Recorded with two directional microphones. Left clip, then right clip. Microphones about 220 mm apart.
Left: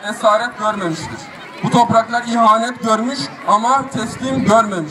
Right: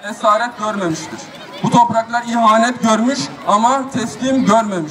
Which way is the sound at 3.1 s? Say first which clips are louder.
Even; 10° left (ahead or behind).